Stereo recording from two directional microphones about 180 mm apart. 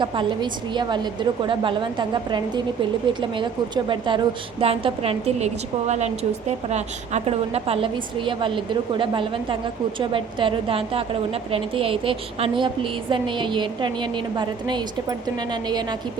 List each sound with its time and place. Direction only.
0.7 s a woman's voice: 25° right (ahead or behind)
3.8 s a woman's voice: 25° right (ahead or behind)
6.7 s a woman's voice: 40° right (ahead or behind)